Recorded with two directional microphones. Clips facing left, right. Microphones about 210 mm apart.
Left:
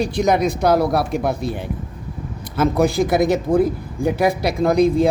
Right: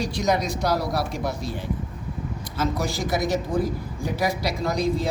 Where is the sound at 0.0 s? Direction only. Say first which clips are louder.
Left 6 dB; 55° left (ahead or behind).